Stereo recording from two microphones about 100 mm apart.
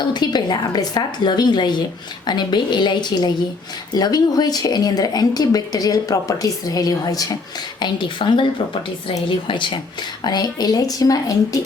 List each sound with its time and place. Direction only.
0.1 s a woman's voice: 45° left (ahead or behind)
10.2 s speech: 40° left (ahead or behind)